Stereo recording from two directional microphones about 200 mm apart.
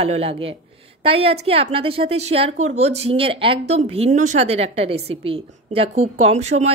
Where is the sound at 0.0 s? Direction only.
30° right (ahead or behind).